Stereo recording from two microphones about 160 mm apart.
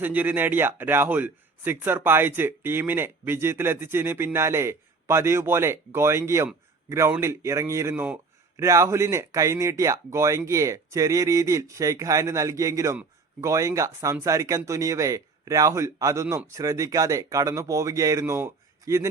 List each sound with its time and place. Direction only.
0.0 s speech: 10° right (ahead or behind)